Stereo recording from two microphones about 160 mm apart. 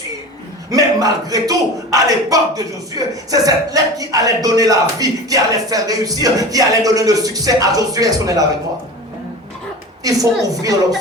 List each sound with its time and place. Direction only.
0.7 s speech: 20° right (ahead or behind)
10.0 s a woman's voice: 20° right (ahead or behind)